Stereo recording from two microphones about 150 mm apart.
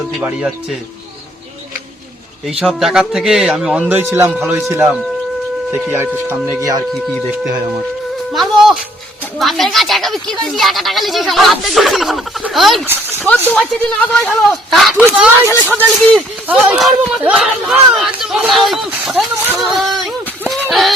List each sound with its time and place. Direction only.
0.2 s speech: 5° right (ahead or behind)
2.5 s speech: 5° right (ahead or behind); by 6.8 s 20° right (ahead or behind)
8.3 s music: centre (ahead or behind)
9.4 s speech: centre (ahead or behind)
12.8 s a sound: 15° right (ahead or behind)
13.5 s speech: 10° left (ahead or behind); by 15.3 s 10° right (ahead or behind)
15.4 s speech: 15° left (ahead or behind)
16.0 s speech: centre (ahead or behind)
16.5 s speech: 10° right (ahead or behind)
19.5 s speech: centre (ahead or behind)
20.5 s a sound: centre (ahead or behind)